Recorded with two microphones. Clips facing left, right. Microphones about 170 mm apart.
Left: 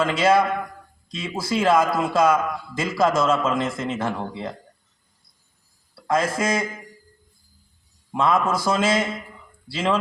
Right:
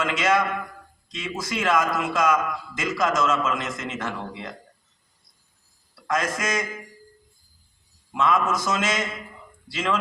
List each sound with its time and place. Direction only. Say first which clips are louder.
0.0 s a man's voice: left 4 dB; 30° left (ahead or behind)
6.1 s a man's voice: left 4 dB; 30° left (ahead or behind)
8.1 s a man's voice: left 2 dB; 30° left (ahead or behind)